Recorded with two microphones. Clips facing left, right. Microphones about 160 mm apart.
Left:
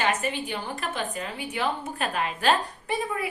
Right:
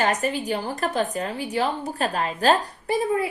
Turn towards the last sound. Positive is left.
turn(degrees=-35)  # may be behind; listen again after turning